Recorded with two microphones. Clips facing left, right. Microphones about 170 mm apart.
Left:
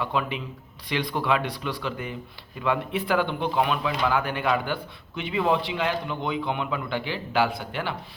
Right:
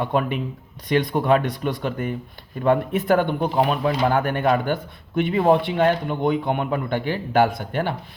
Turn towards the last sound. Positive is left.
turn(degrees=-50)  # may be behind; listen again after turning